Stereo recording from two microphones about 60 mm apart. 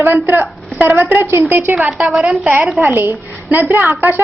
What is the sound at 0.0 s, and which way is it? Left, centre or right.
A woman's voice, right.